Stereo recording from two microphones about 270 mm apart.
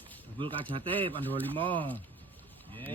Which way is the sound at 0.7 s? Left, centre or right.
Centre.